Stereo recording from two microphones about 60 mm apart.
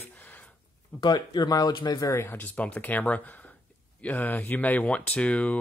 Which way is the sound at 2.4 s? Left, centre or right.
Left.